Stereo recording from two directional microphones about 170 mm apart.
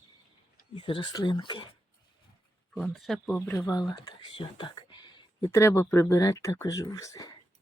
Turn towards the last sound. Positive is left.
turn(degrees=20)  # may be behind; listen again after turning